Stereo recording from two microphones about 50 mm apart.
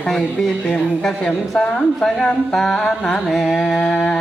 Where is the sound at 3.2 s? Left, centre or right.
Centre.